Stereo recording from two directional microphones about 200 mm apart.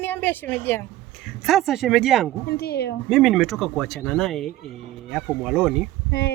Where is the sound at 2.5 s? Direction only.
50° left (ahead or behind).